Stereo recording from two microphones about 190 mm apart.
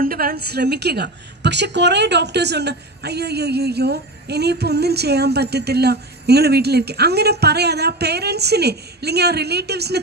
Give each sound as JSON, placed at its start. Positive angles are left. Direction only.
{"t": 0.0, "sound": "a woman's voice", "side_deg": -50}